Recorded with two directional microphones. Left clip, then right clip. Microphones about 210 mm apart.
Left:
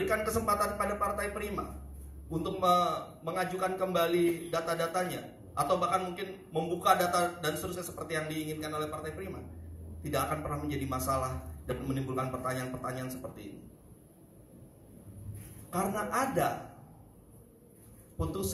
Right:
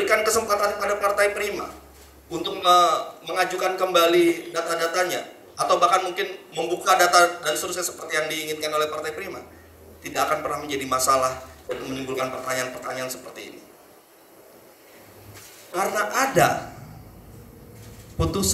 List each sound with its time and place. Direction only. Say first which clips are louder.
0.0 s a man's voice: right 10 dB; 55° right (ahead or behind)
2.6 s a man's voice: right 10 dB; 55° right (ahead or behind)
15.7 s a man's voice: right 9 dB; 55° right (ahead or behind)
18.1 s a man's voice: right 11 dB; 55° right (ahead or behind)